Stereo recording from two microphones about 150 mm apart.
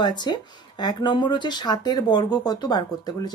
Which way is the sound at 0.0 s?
30° left (ahead or behind).